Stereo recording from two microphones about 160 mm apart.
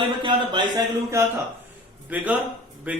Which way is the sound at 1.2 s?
20° right (ahead or behind).